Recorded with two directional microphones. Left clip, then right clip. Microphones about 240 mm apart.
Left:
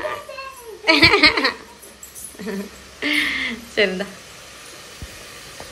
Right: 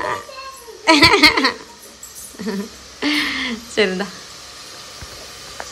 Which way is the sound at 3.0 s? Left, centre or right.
Centre.